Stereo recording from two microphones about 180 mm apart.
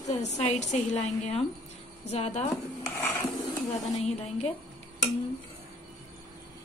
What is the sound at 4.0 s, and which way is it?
Speech, 35° left (ahead or behind).